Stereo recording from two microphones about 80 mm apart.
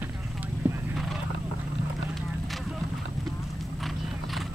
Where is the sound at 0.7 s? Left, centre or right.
Right.